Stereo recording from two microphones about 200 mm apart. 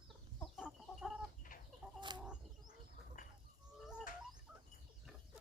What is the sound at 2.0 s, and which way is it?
Chicken, 20° right (ahead or behind).